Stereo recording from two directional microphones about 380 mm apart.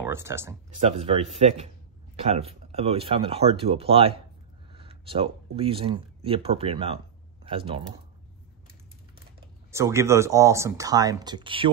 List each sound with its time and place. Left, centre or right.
0.1 s speech: centre
9.7 s speech: centre